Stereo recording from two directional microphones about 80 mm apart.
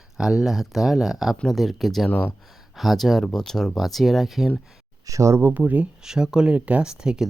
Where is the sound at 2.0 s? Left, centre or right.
Centre.